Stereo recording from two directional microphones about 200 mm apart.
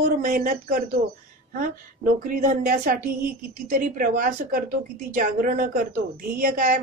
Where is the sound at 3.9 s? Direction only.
40° right (ahead or behind).